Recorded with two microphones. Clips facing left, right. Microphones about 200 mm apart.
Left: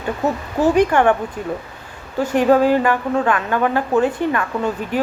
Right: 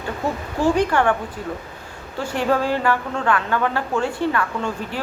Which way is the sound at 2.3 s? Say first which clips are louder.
Left 7 dB; 15° left (ahead or behind).